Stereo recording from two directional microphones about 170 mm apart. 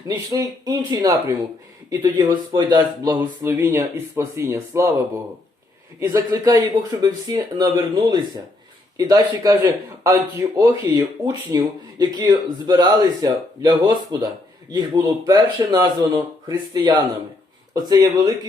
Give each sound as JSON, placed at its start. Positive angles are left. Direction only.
{"t": 0.1, "sound": "a man's voice", "side_deg": -20}
{"t": 3.2, "sound": "a man's voice", "side_deg": -15}